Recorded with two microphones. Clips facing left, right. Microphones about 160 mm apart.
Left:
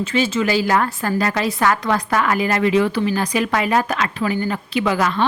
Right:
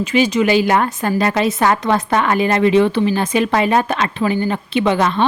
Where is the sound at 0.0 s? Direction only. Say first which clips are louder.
Right 4 dB; 15° right (ahead or behind).